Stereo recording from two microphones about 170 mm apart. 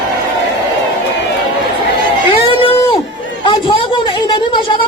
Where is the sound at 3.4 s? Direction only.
30° left (ahead or behind).